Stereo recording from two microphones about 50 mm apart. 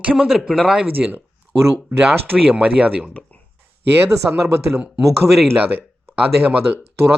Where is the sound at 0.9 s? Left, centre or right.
Right.